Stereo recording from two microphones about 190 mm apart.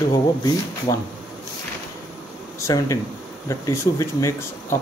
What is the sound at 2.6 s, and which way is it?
Speech, 15° left (ahead or behind).